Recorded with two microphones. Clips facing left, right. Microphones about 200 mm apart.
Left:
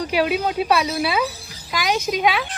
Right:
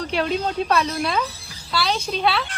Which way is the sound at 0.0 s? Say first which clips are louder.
Left 2 dB; 10° left (ahead or behind).